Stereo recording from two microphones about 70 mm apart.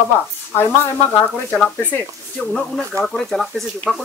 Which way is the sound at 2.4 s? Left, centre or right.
Centre.